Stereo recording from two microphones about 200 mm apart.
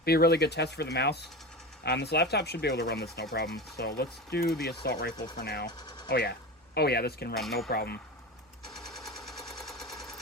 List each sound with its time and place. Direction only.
0.0 s speech: 55° left (ahead or behind)
5.1 s speech: 20° left (ahead or behind)
5.4 s speech: 50° left (ahead or behind)
5.6 s speech: 20° left (ahead or behind)
6.1 s speech: 50° left (ahead or behind)
7.3 s speech: centre (ahead or behind)
7.7 s speech: 50° left (ahead or behind)
8.7 s machine gun: centre (ahead or behind)